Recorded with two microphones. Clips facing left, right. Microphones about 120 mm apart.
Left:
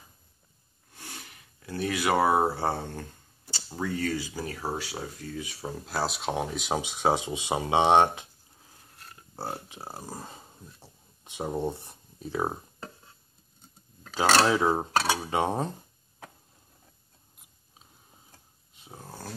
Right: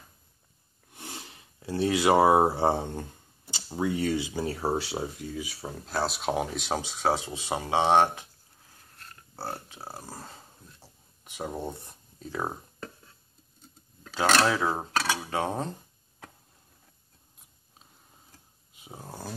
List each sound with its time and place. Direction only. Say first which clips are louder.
0.9 s a sound: right 3 dB; 25° right (ahead or behind)
3.8 s speech: right 3 dB; 20° right (ahead or behind)
5.3 s speech: even; 5° right (ahead or behind)
6.8 s speech: left 2 dB; 15° left (ahead or behind)
14.4 s cutlery: left 2 dB; 20° left (ahead or behind)
14.9 s speech: left 3 dB; 30° left (ahead or behind)
15.2 s speech: left 2 dB; 15° left (ahead or behind)
18.8 s dog: right 2 dB; 10° right (ahead or behind)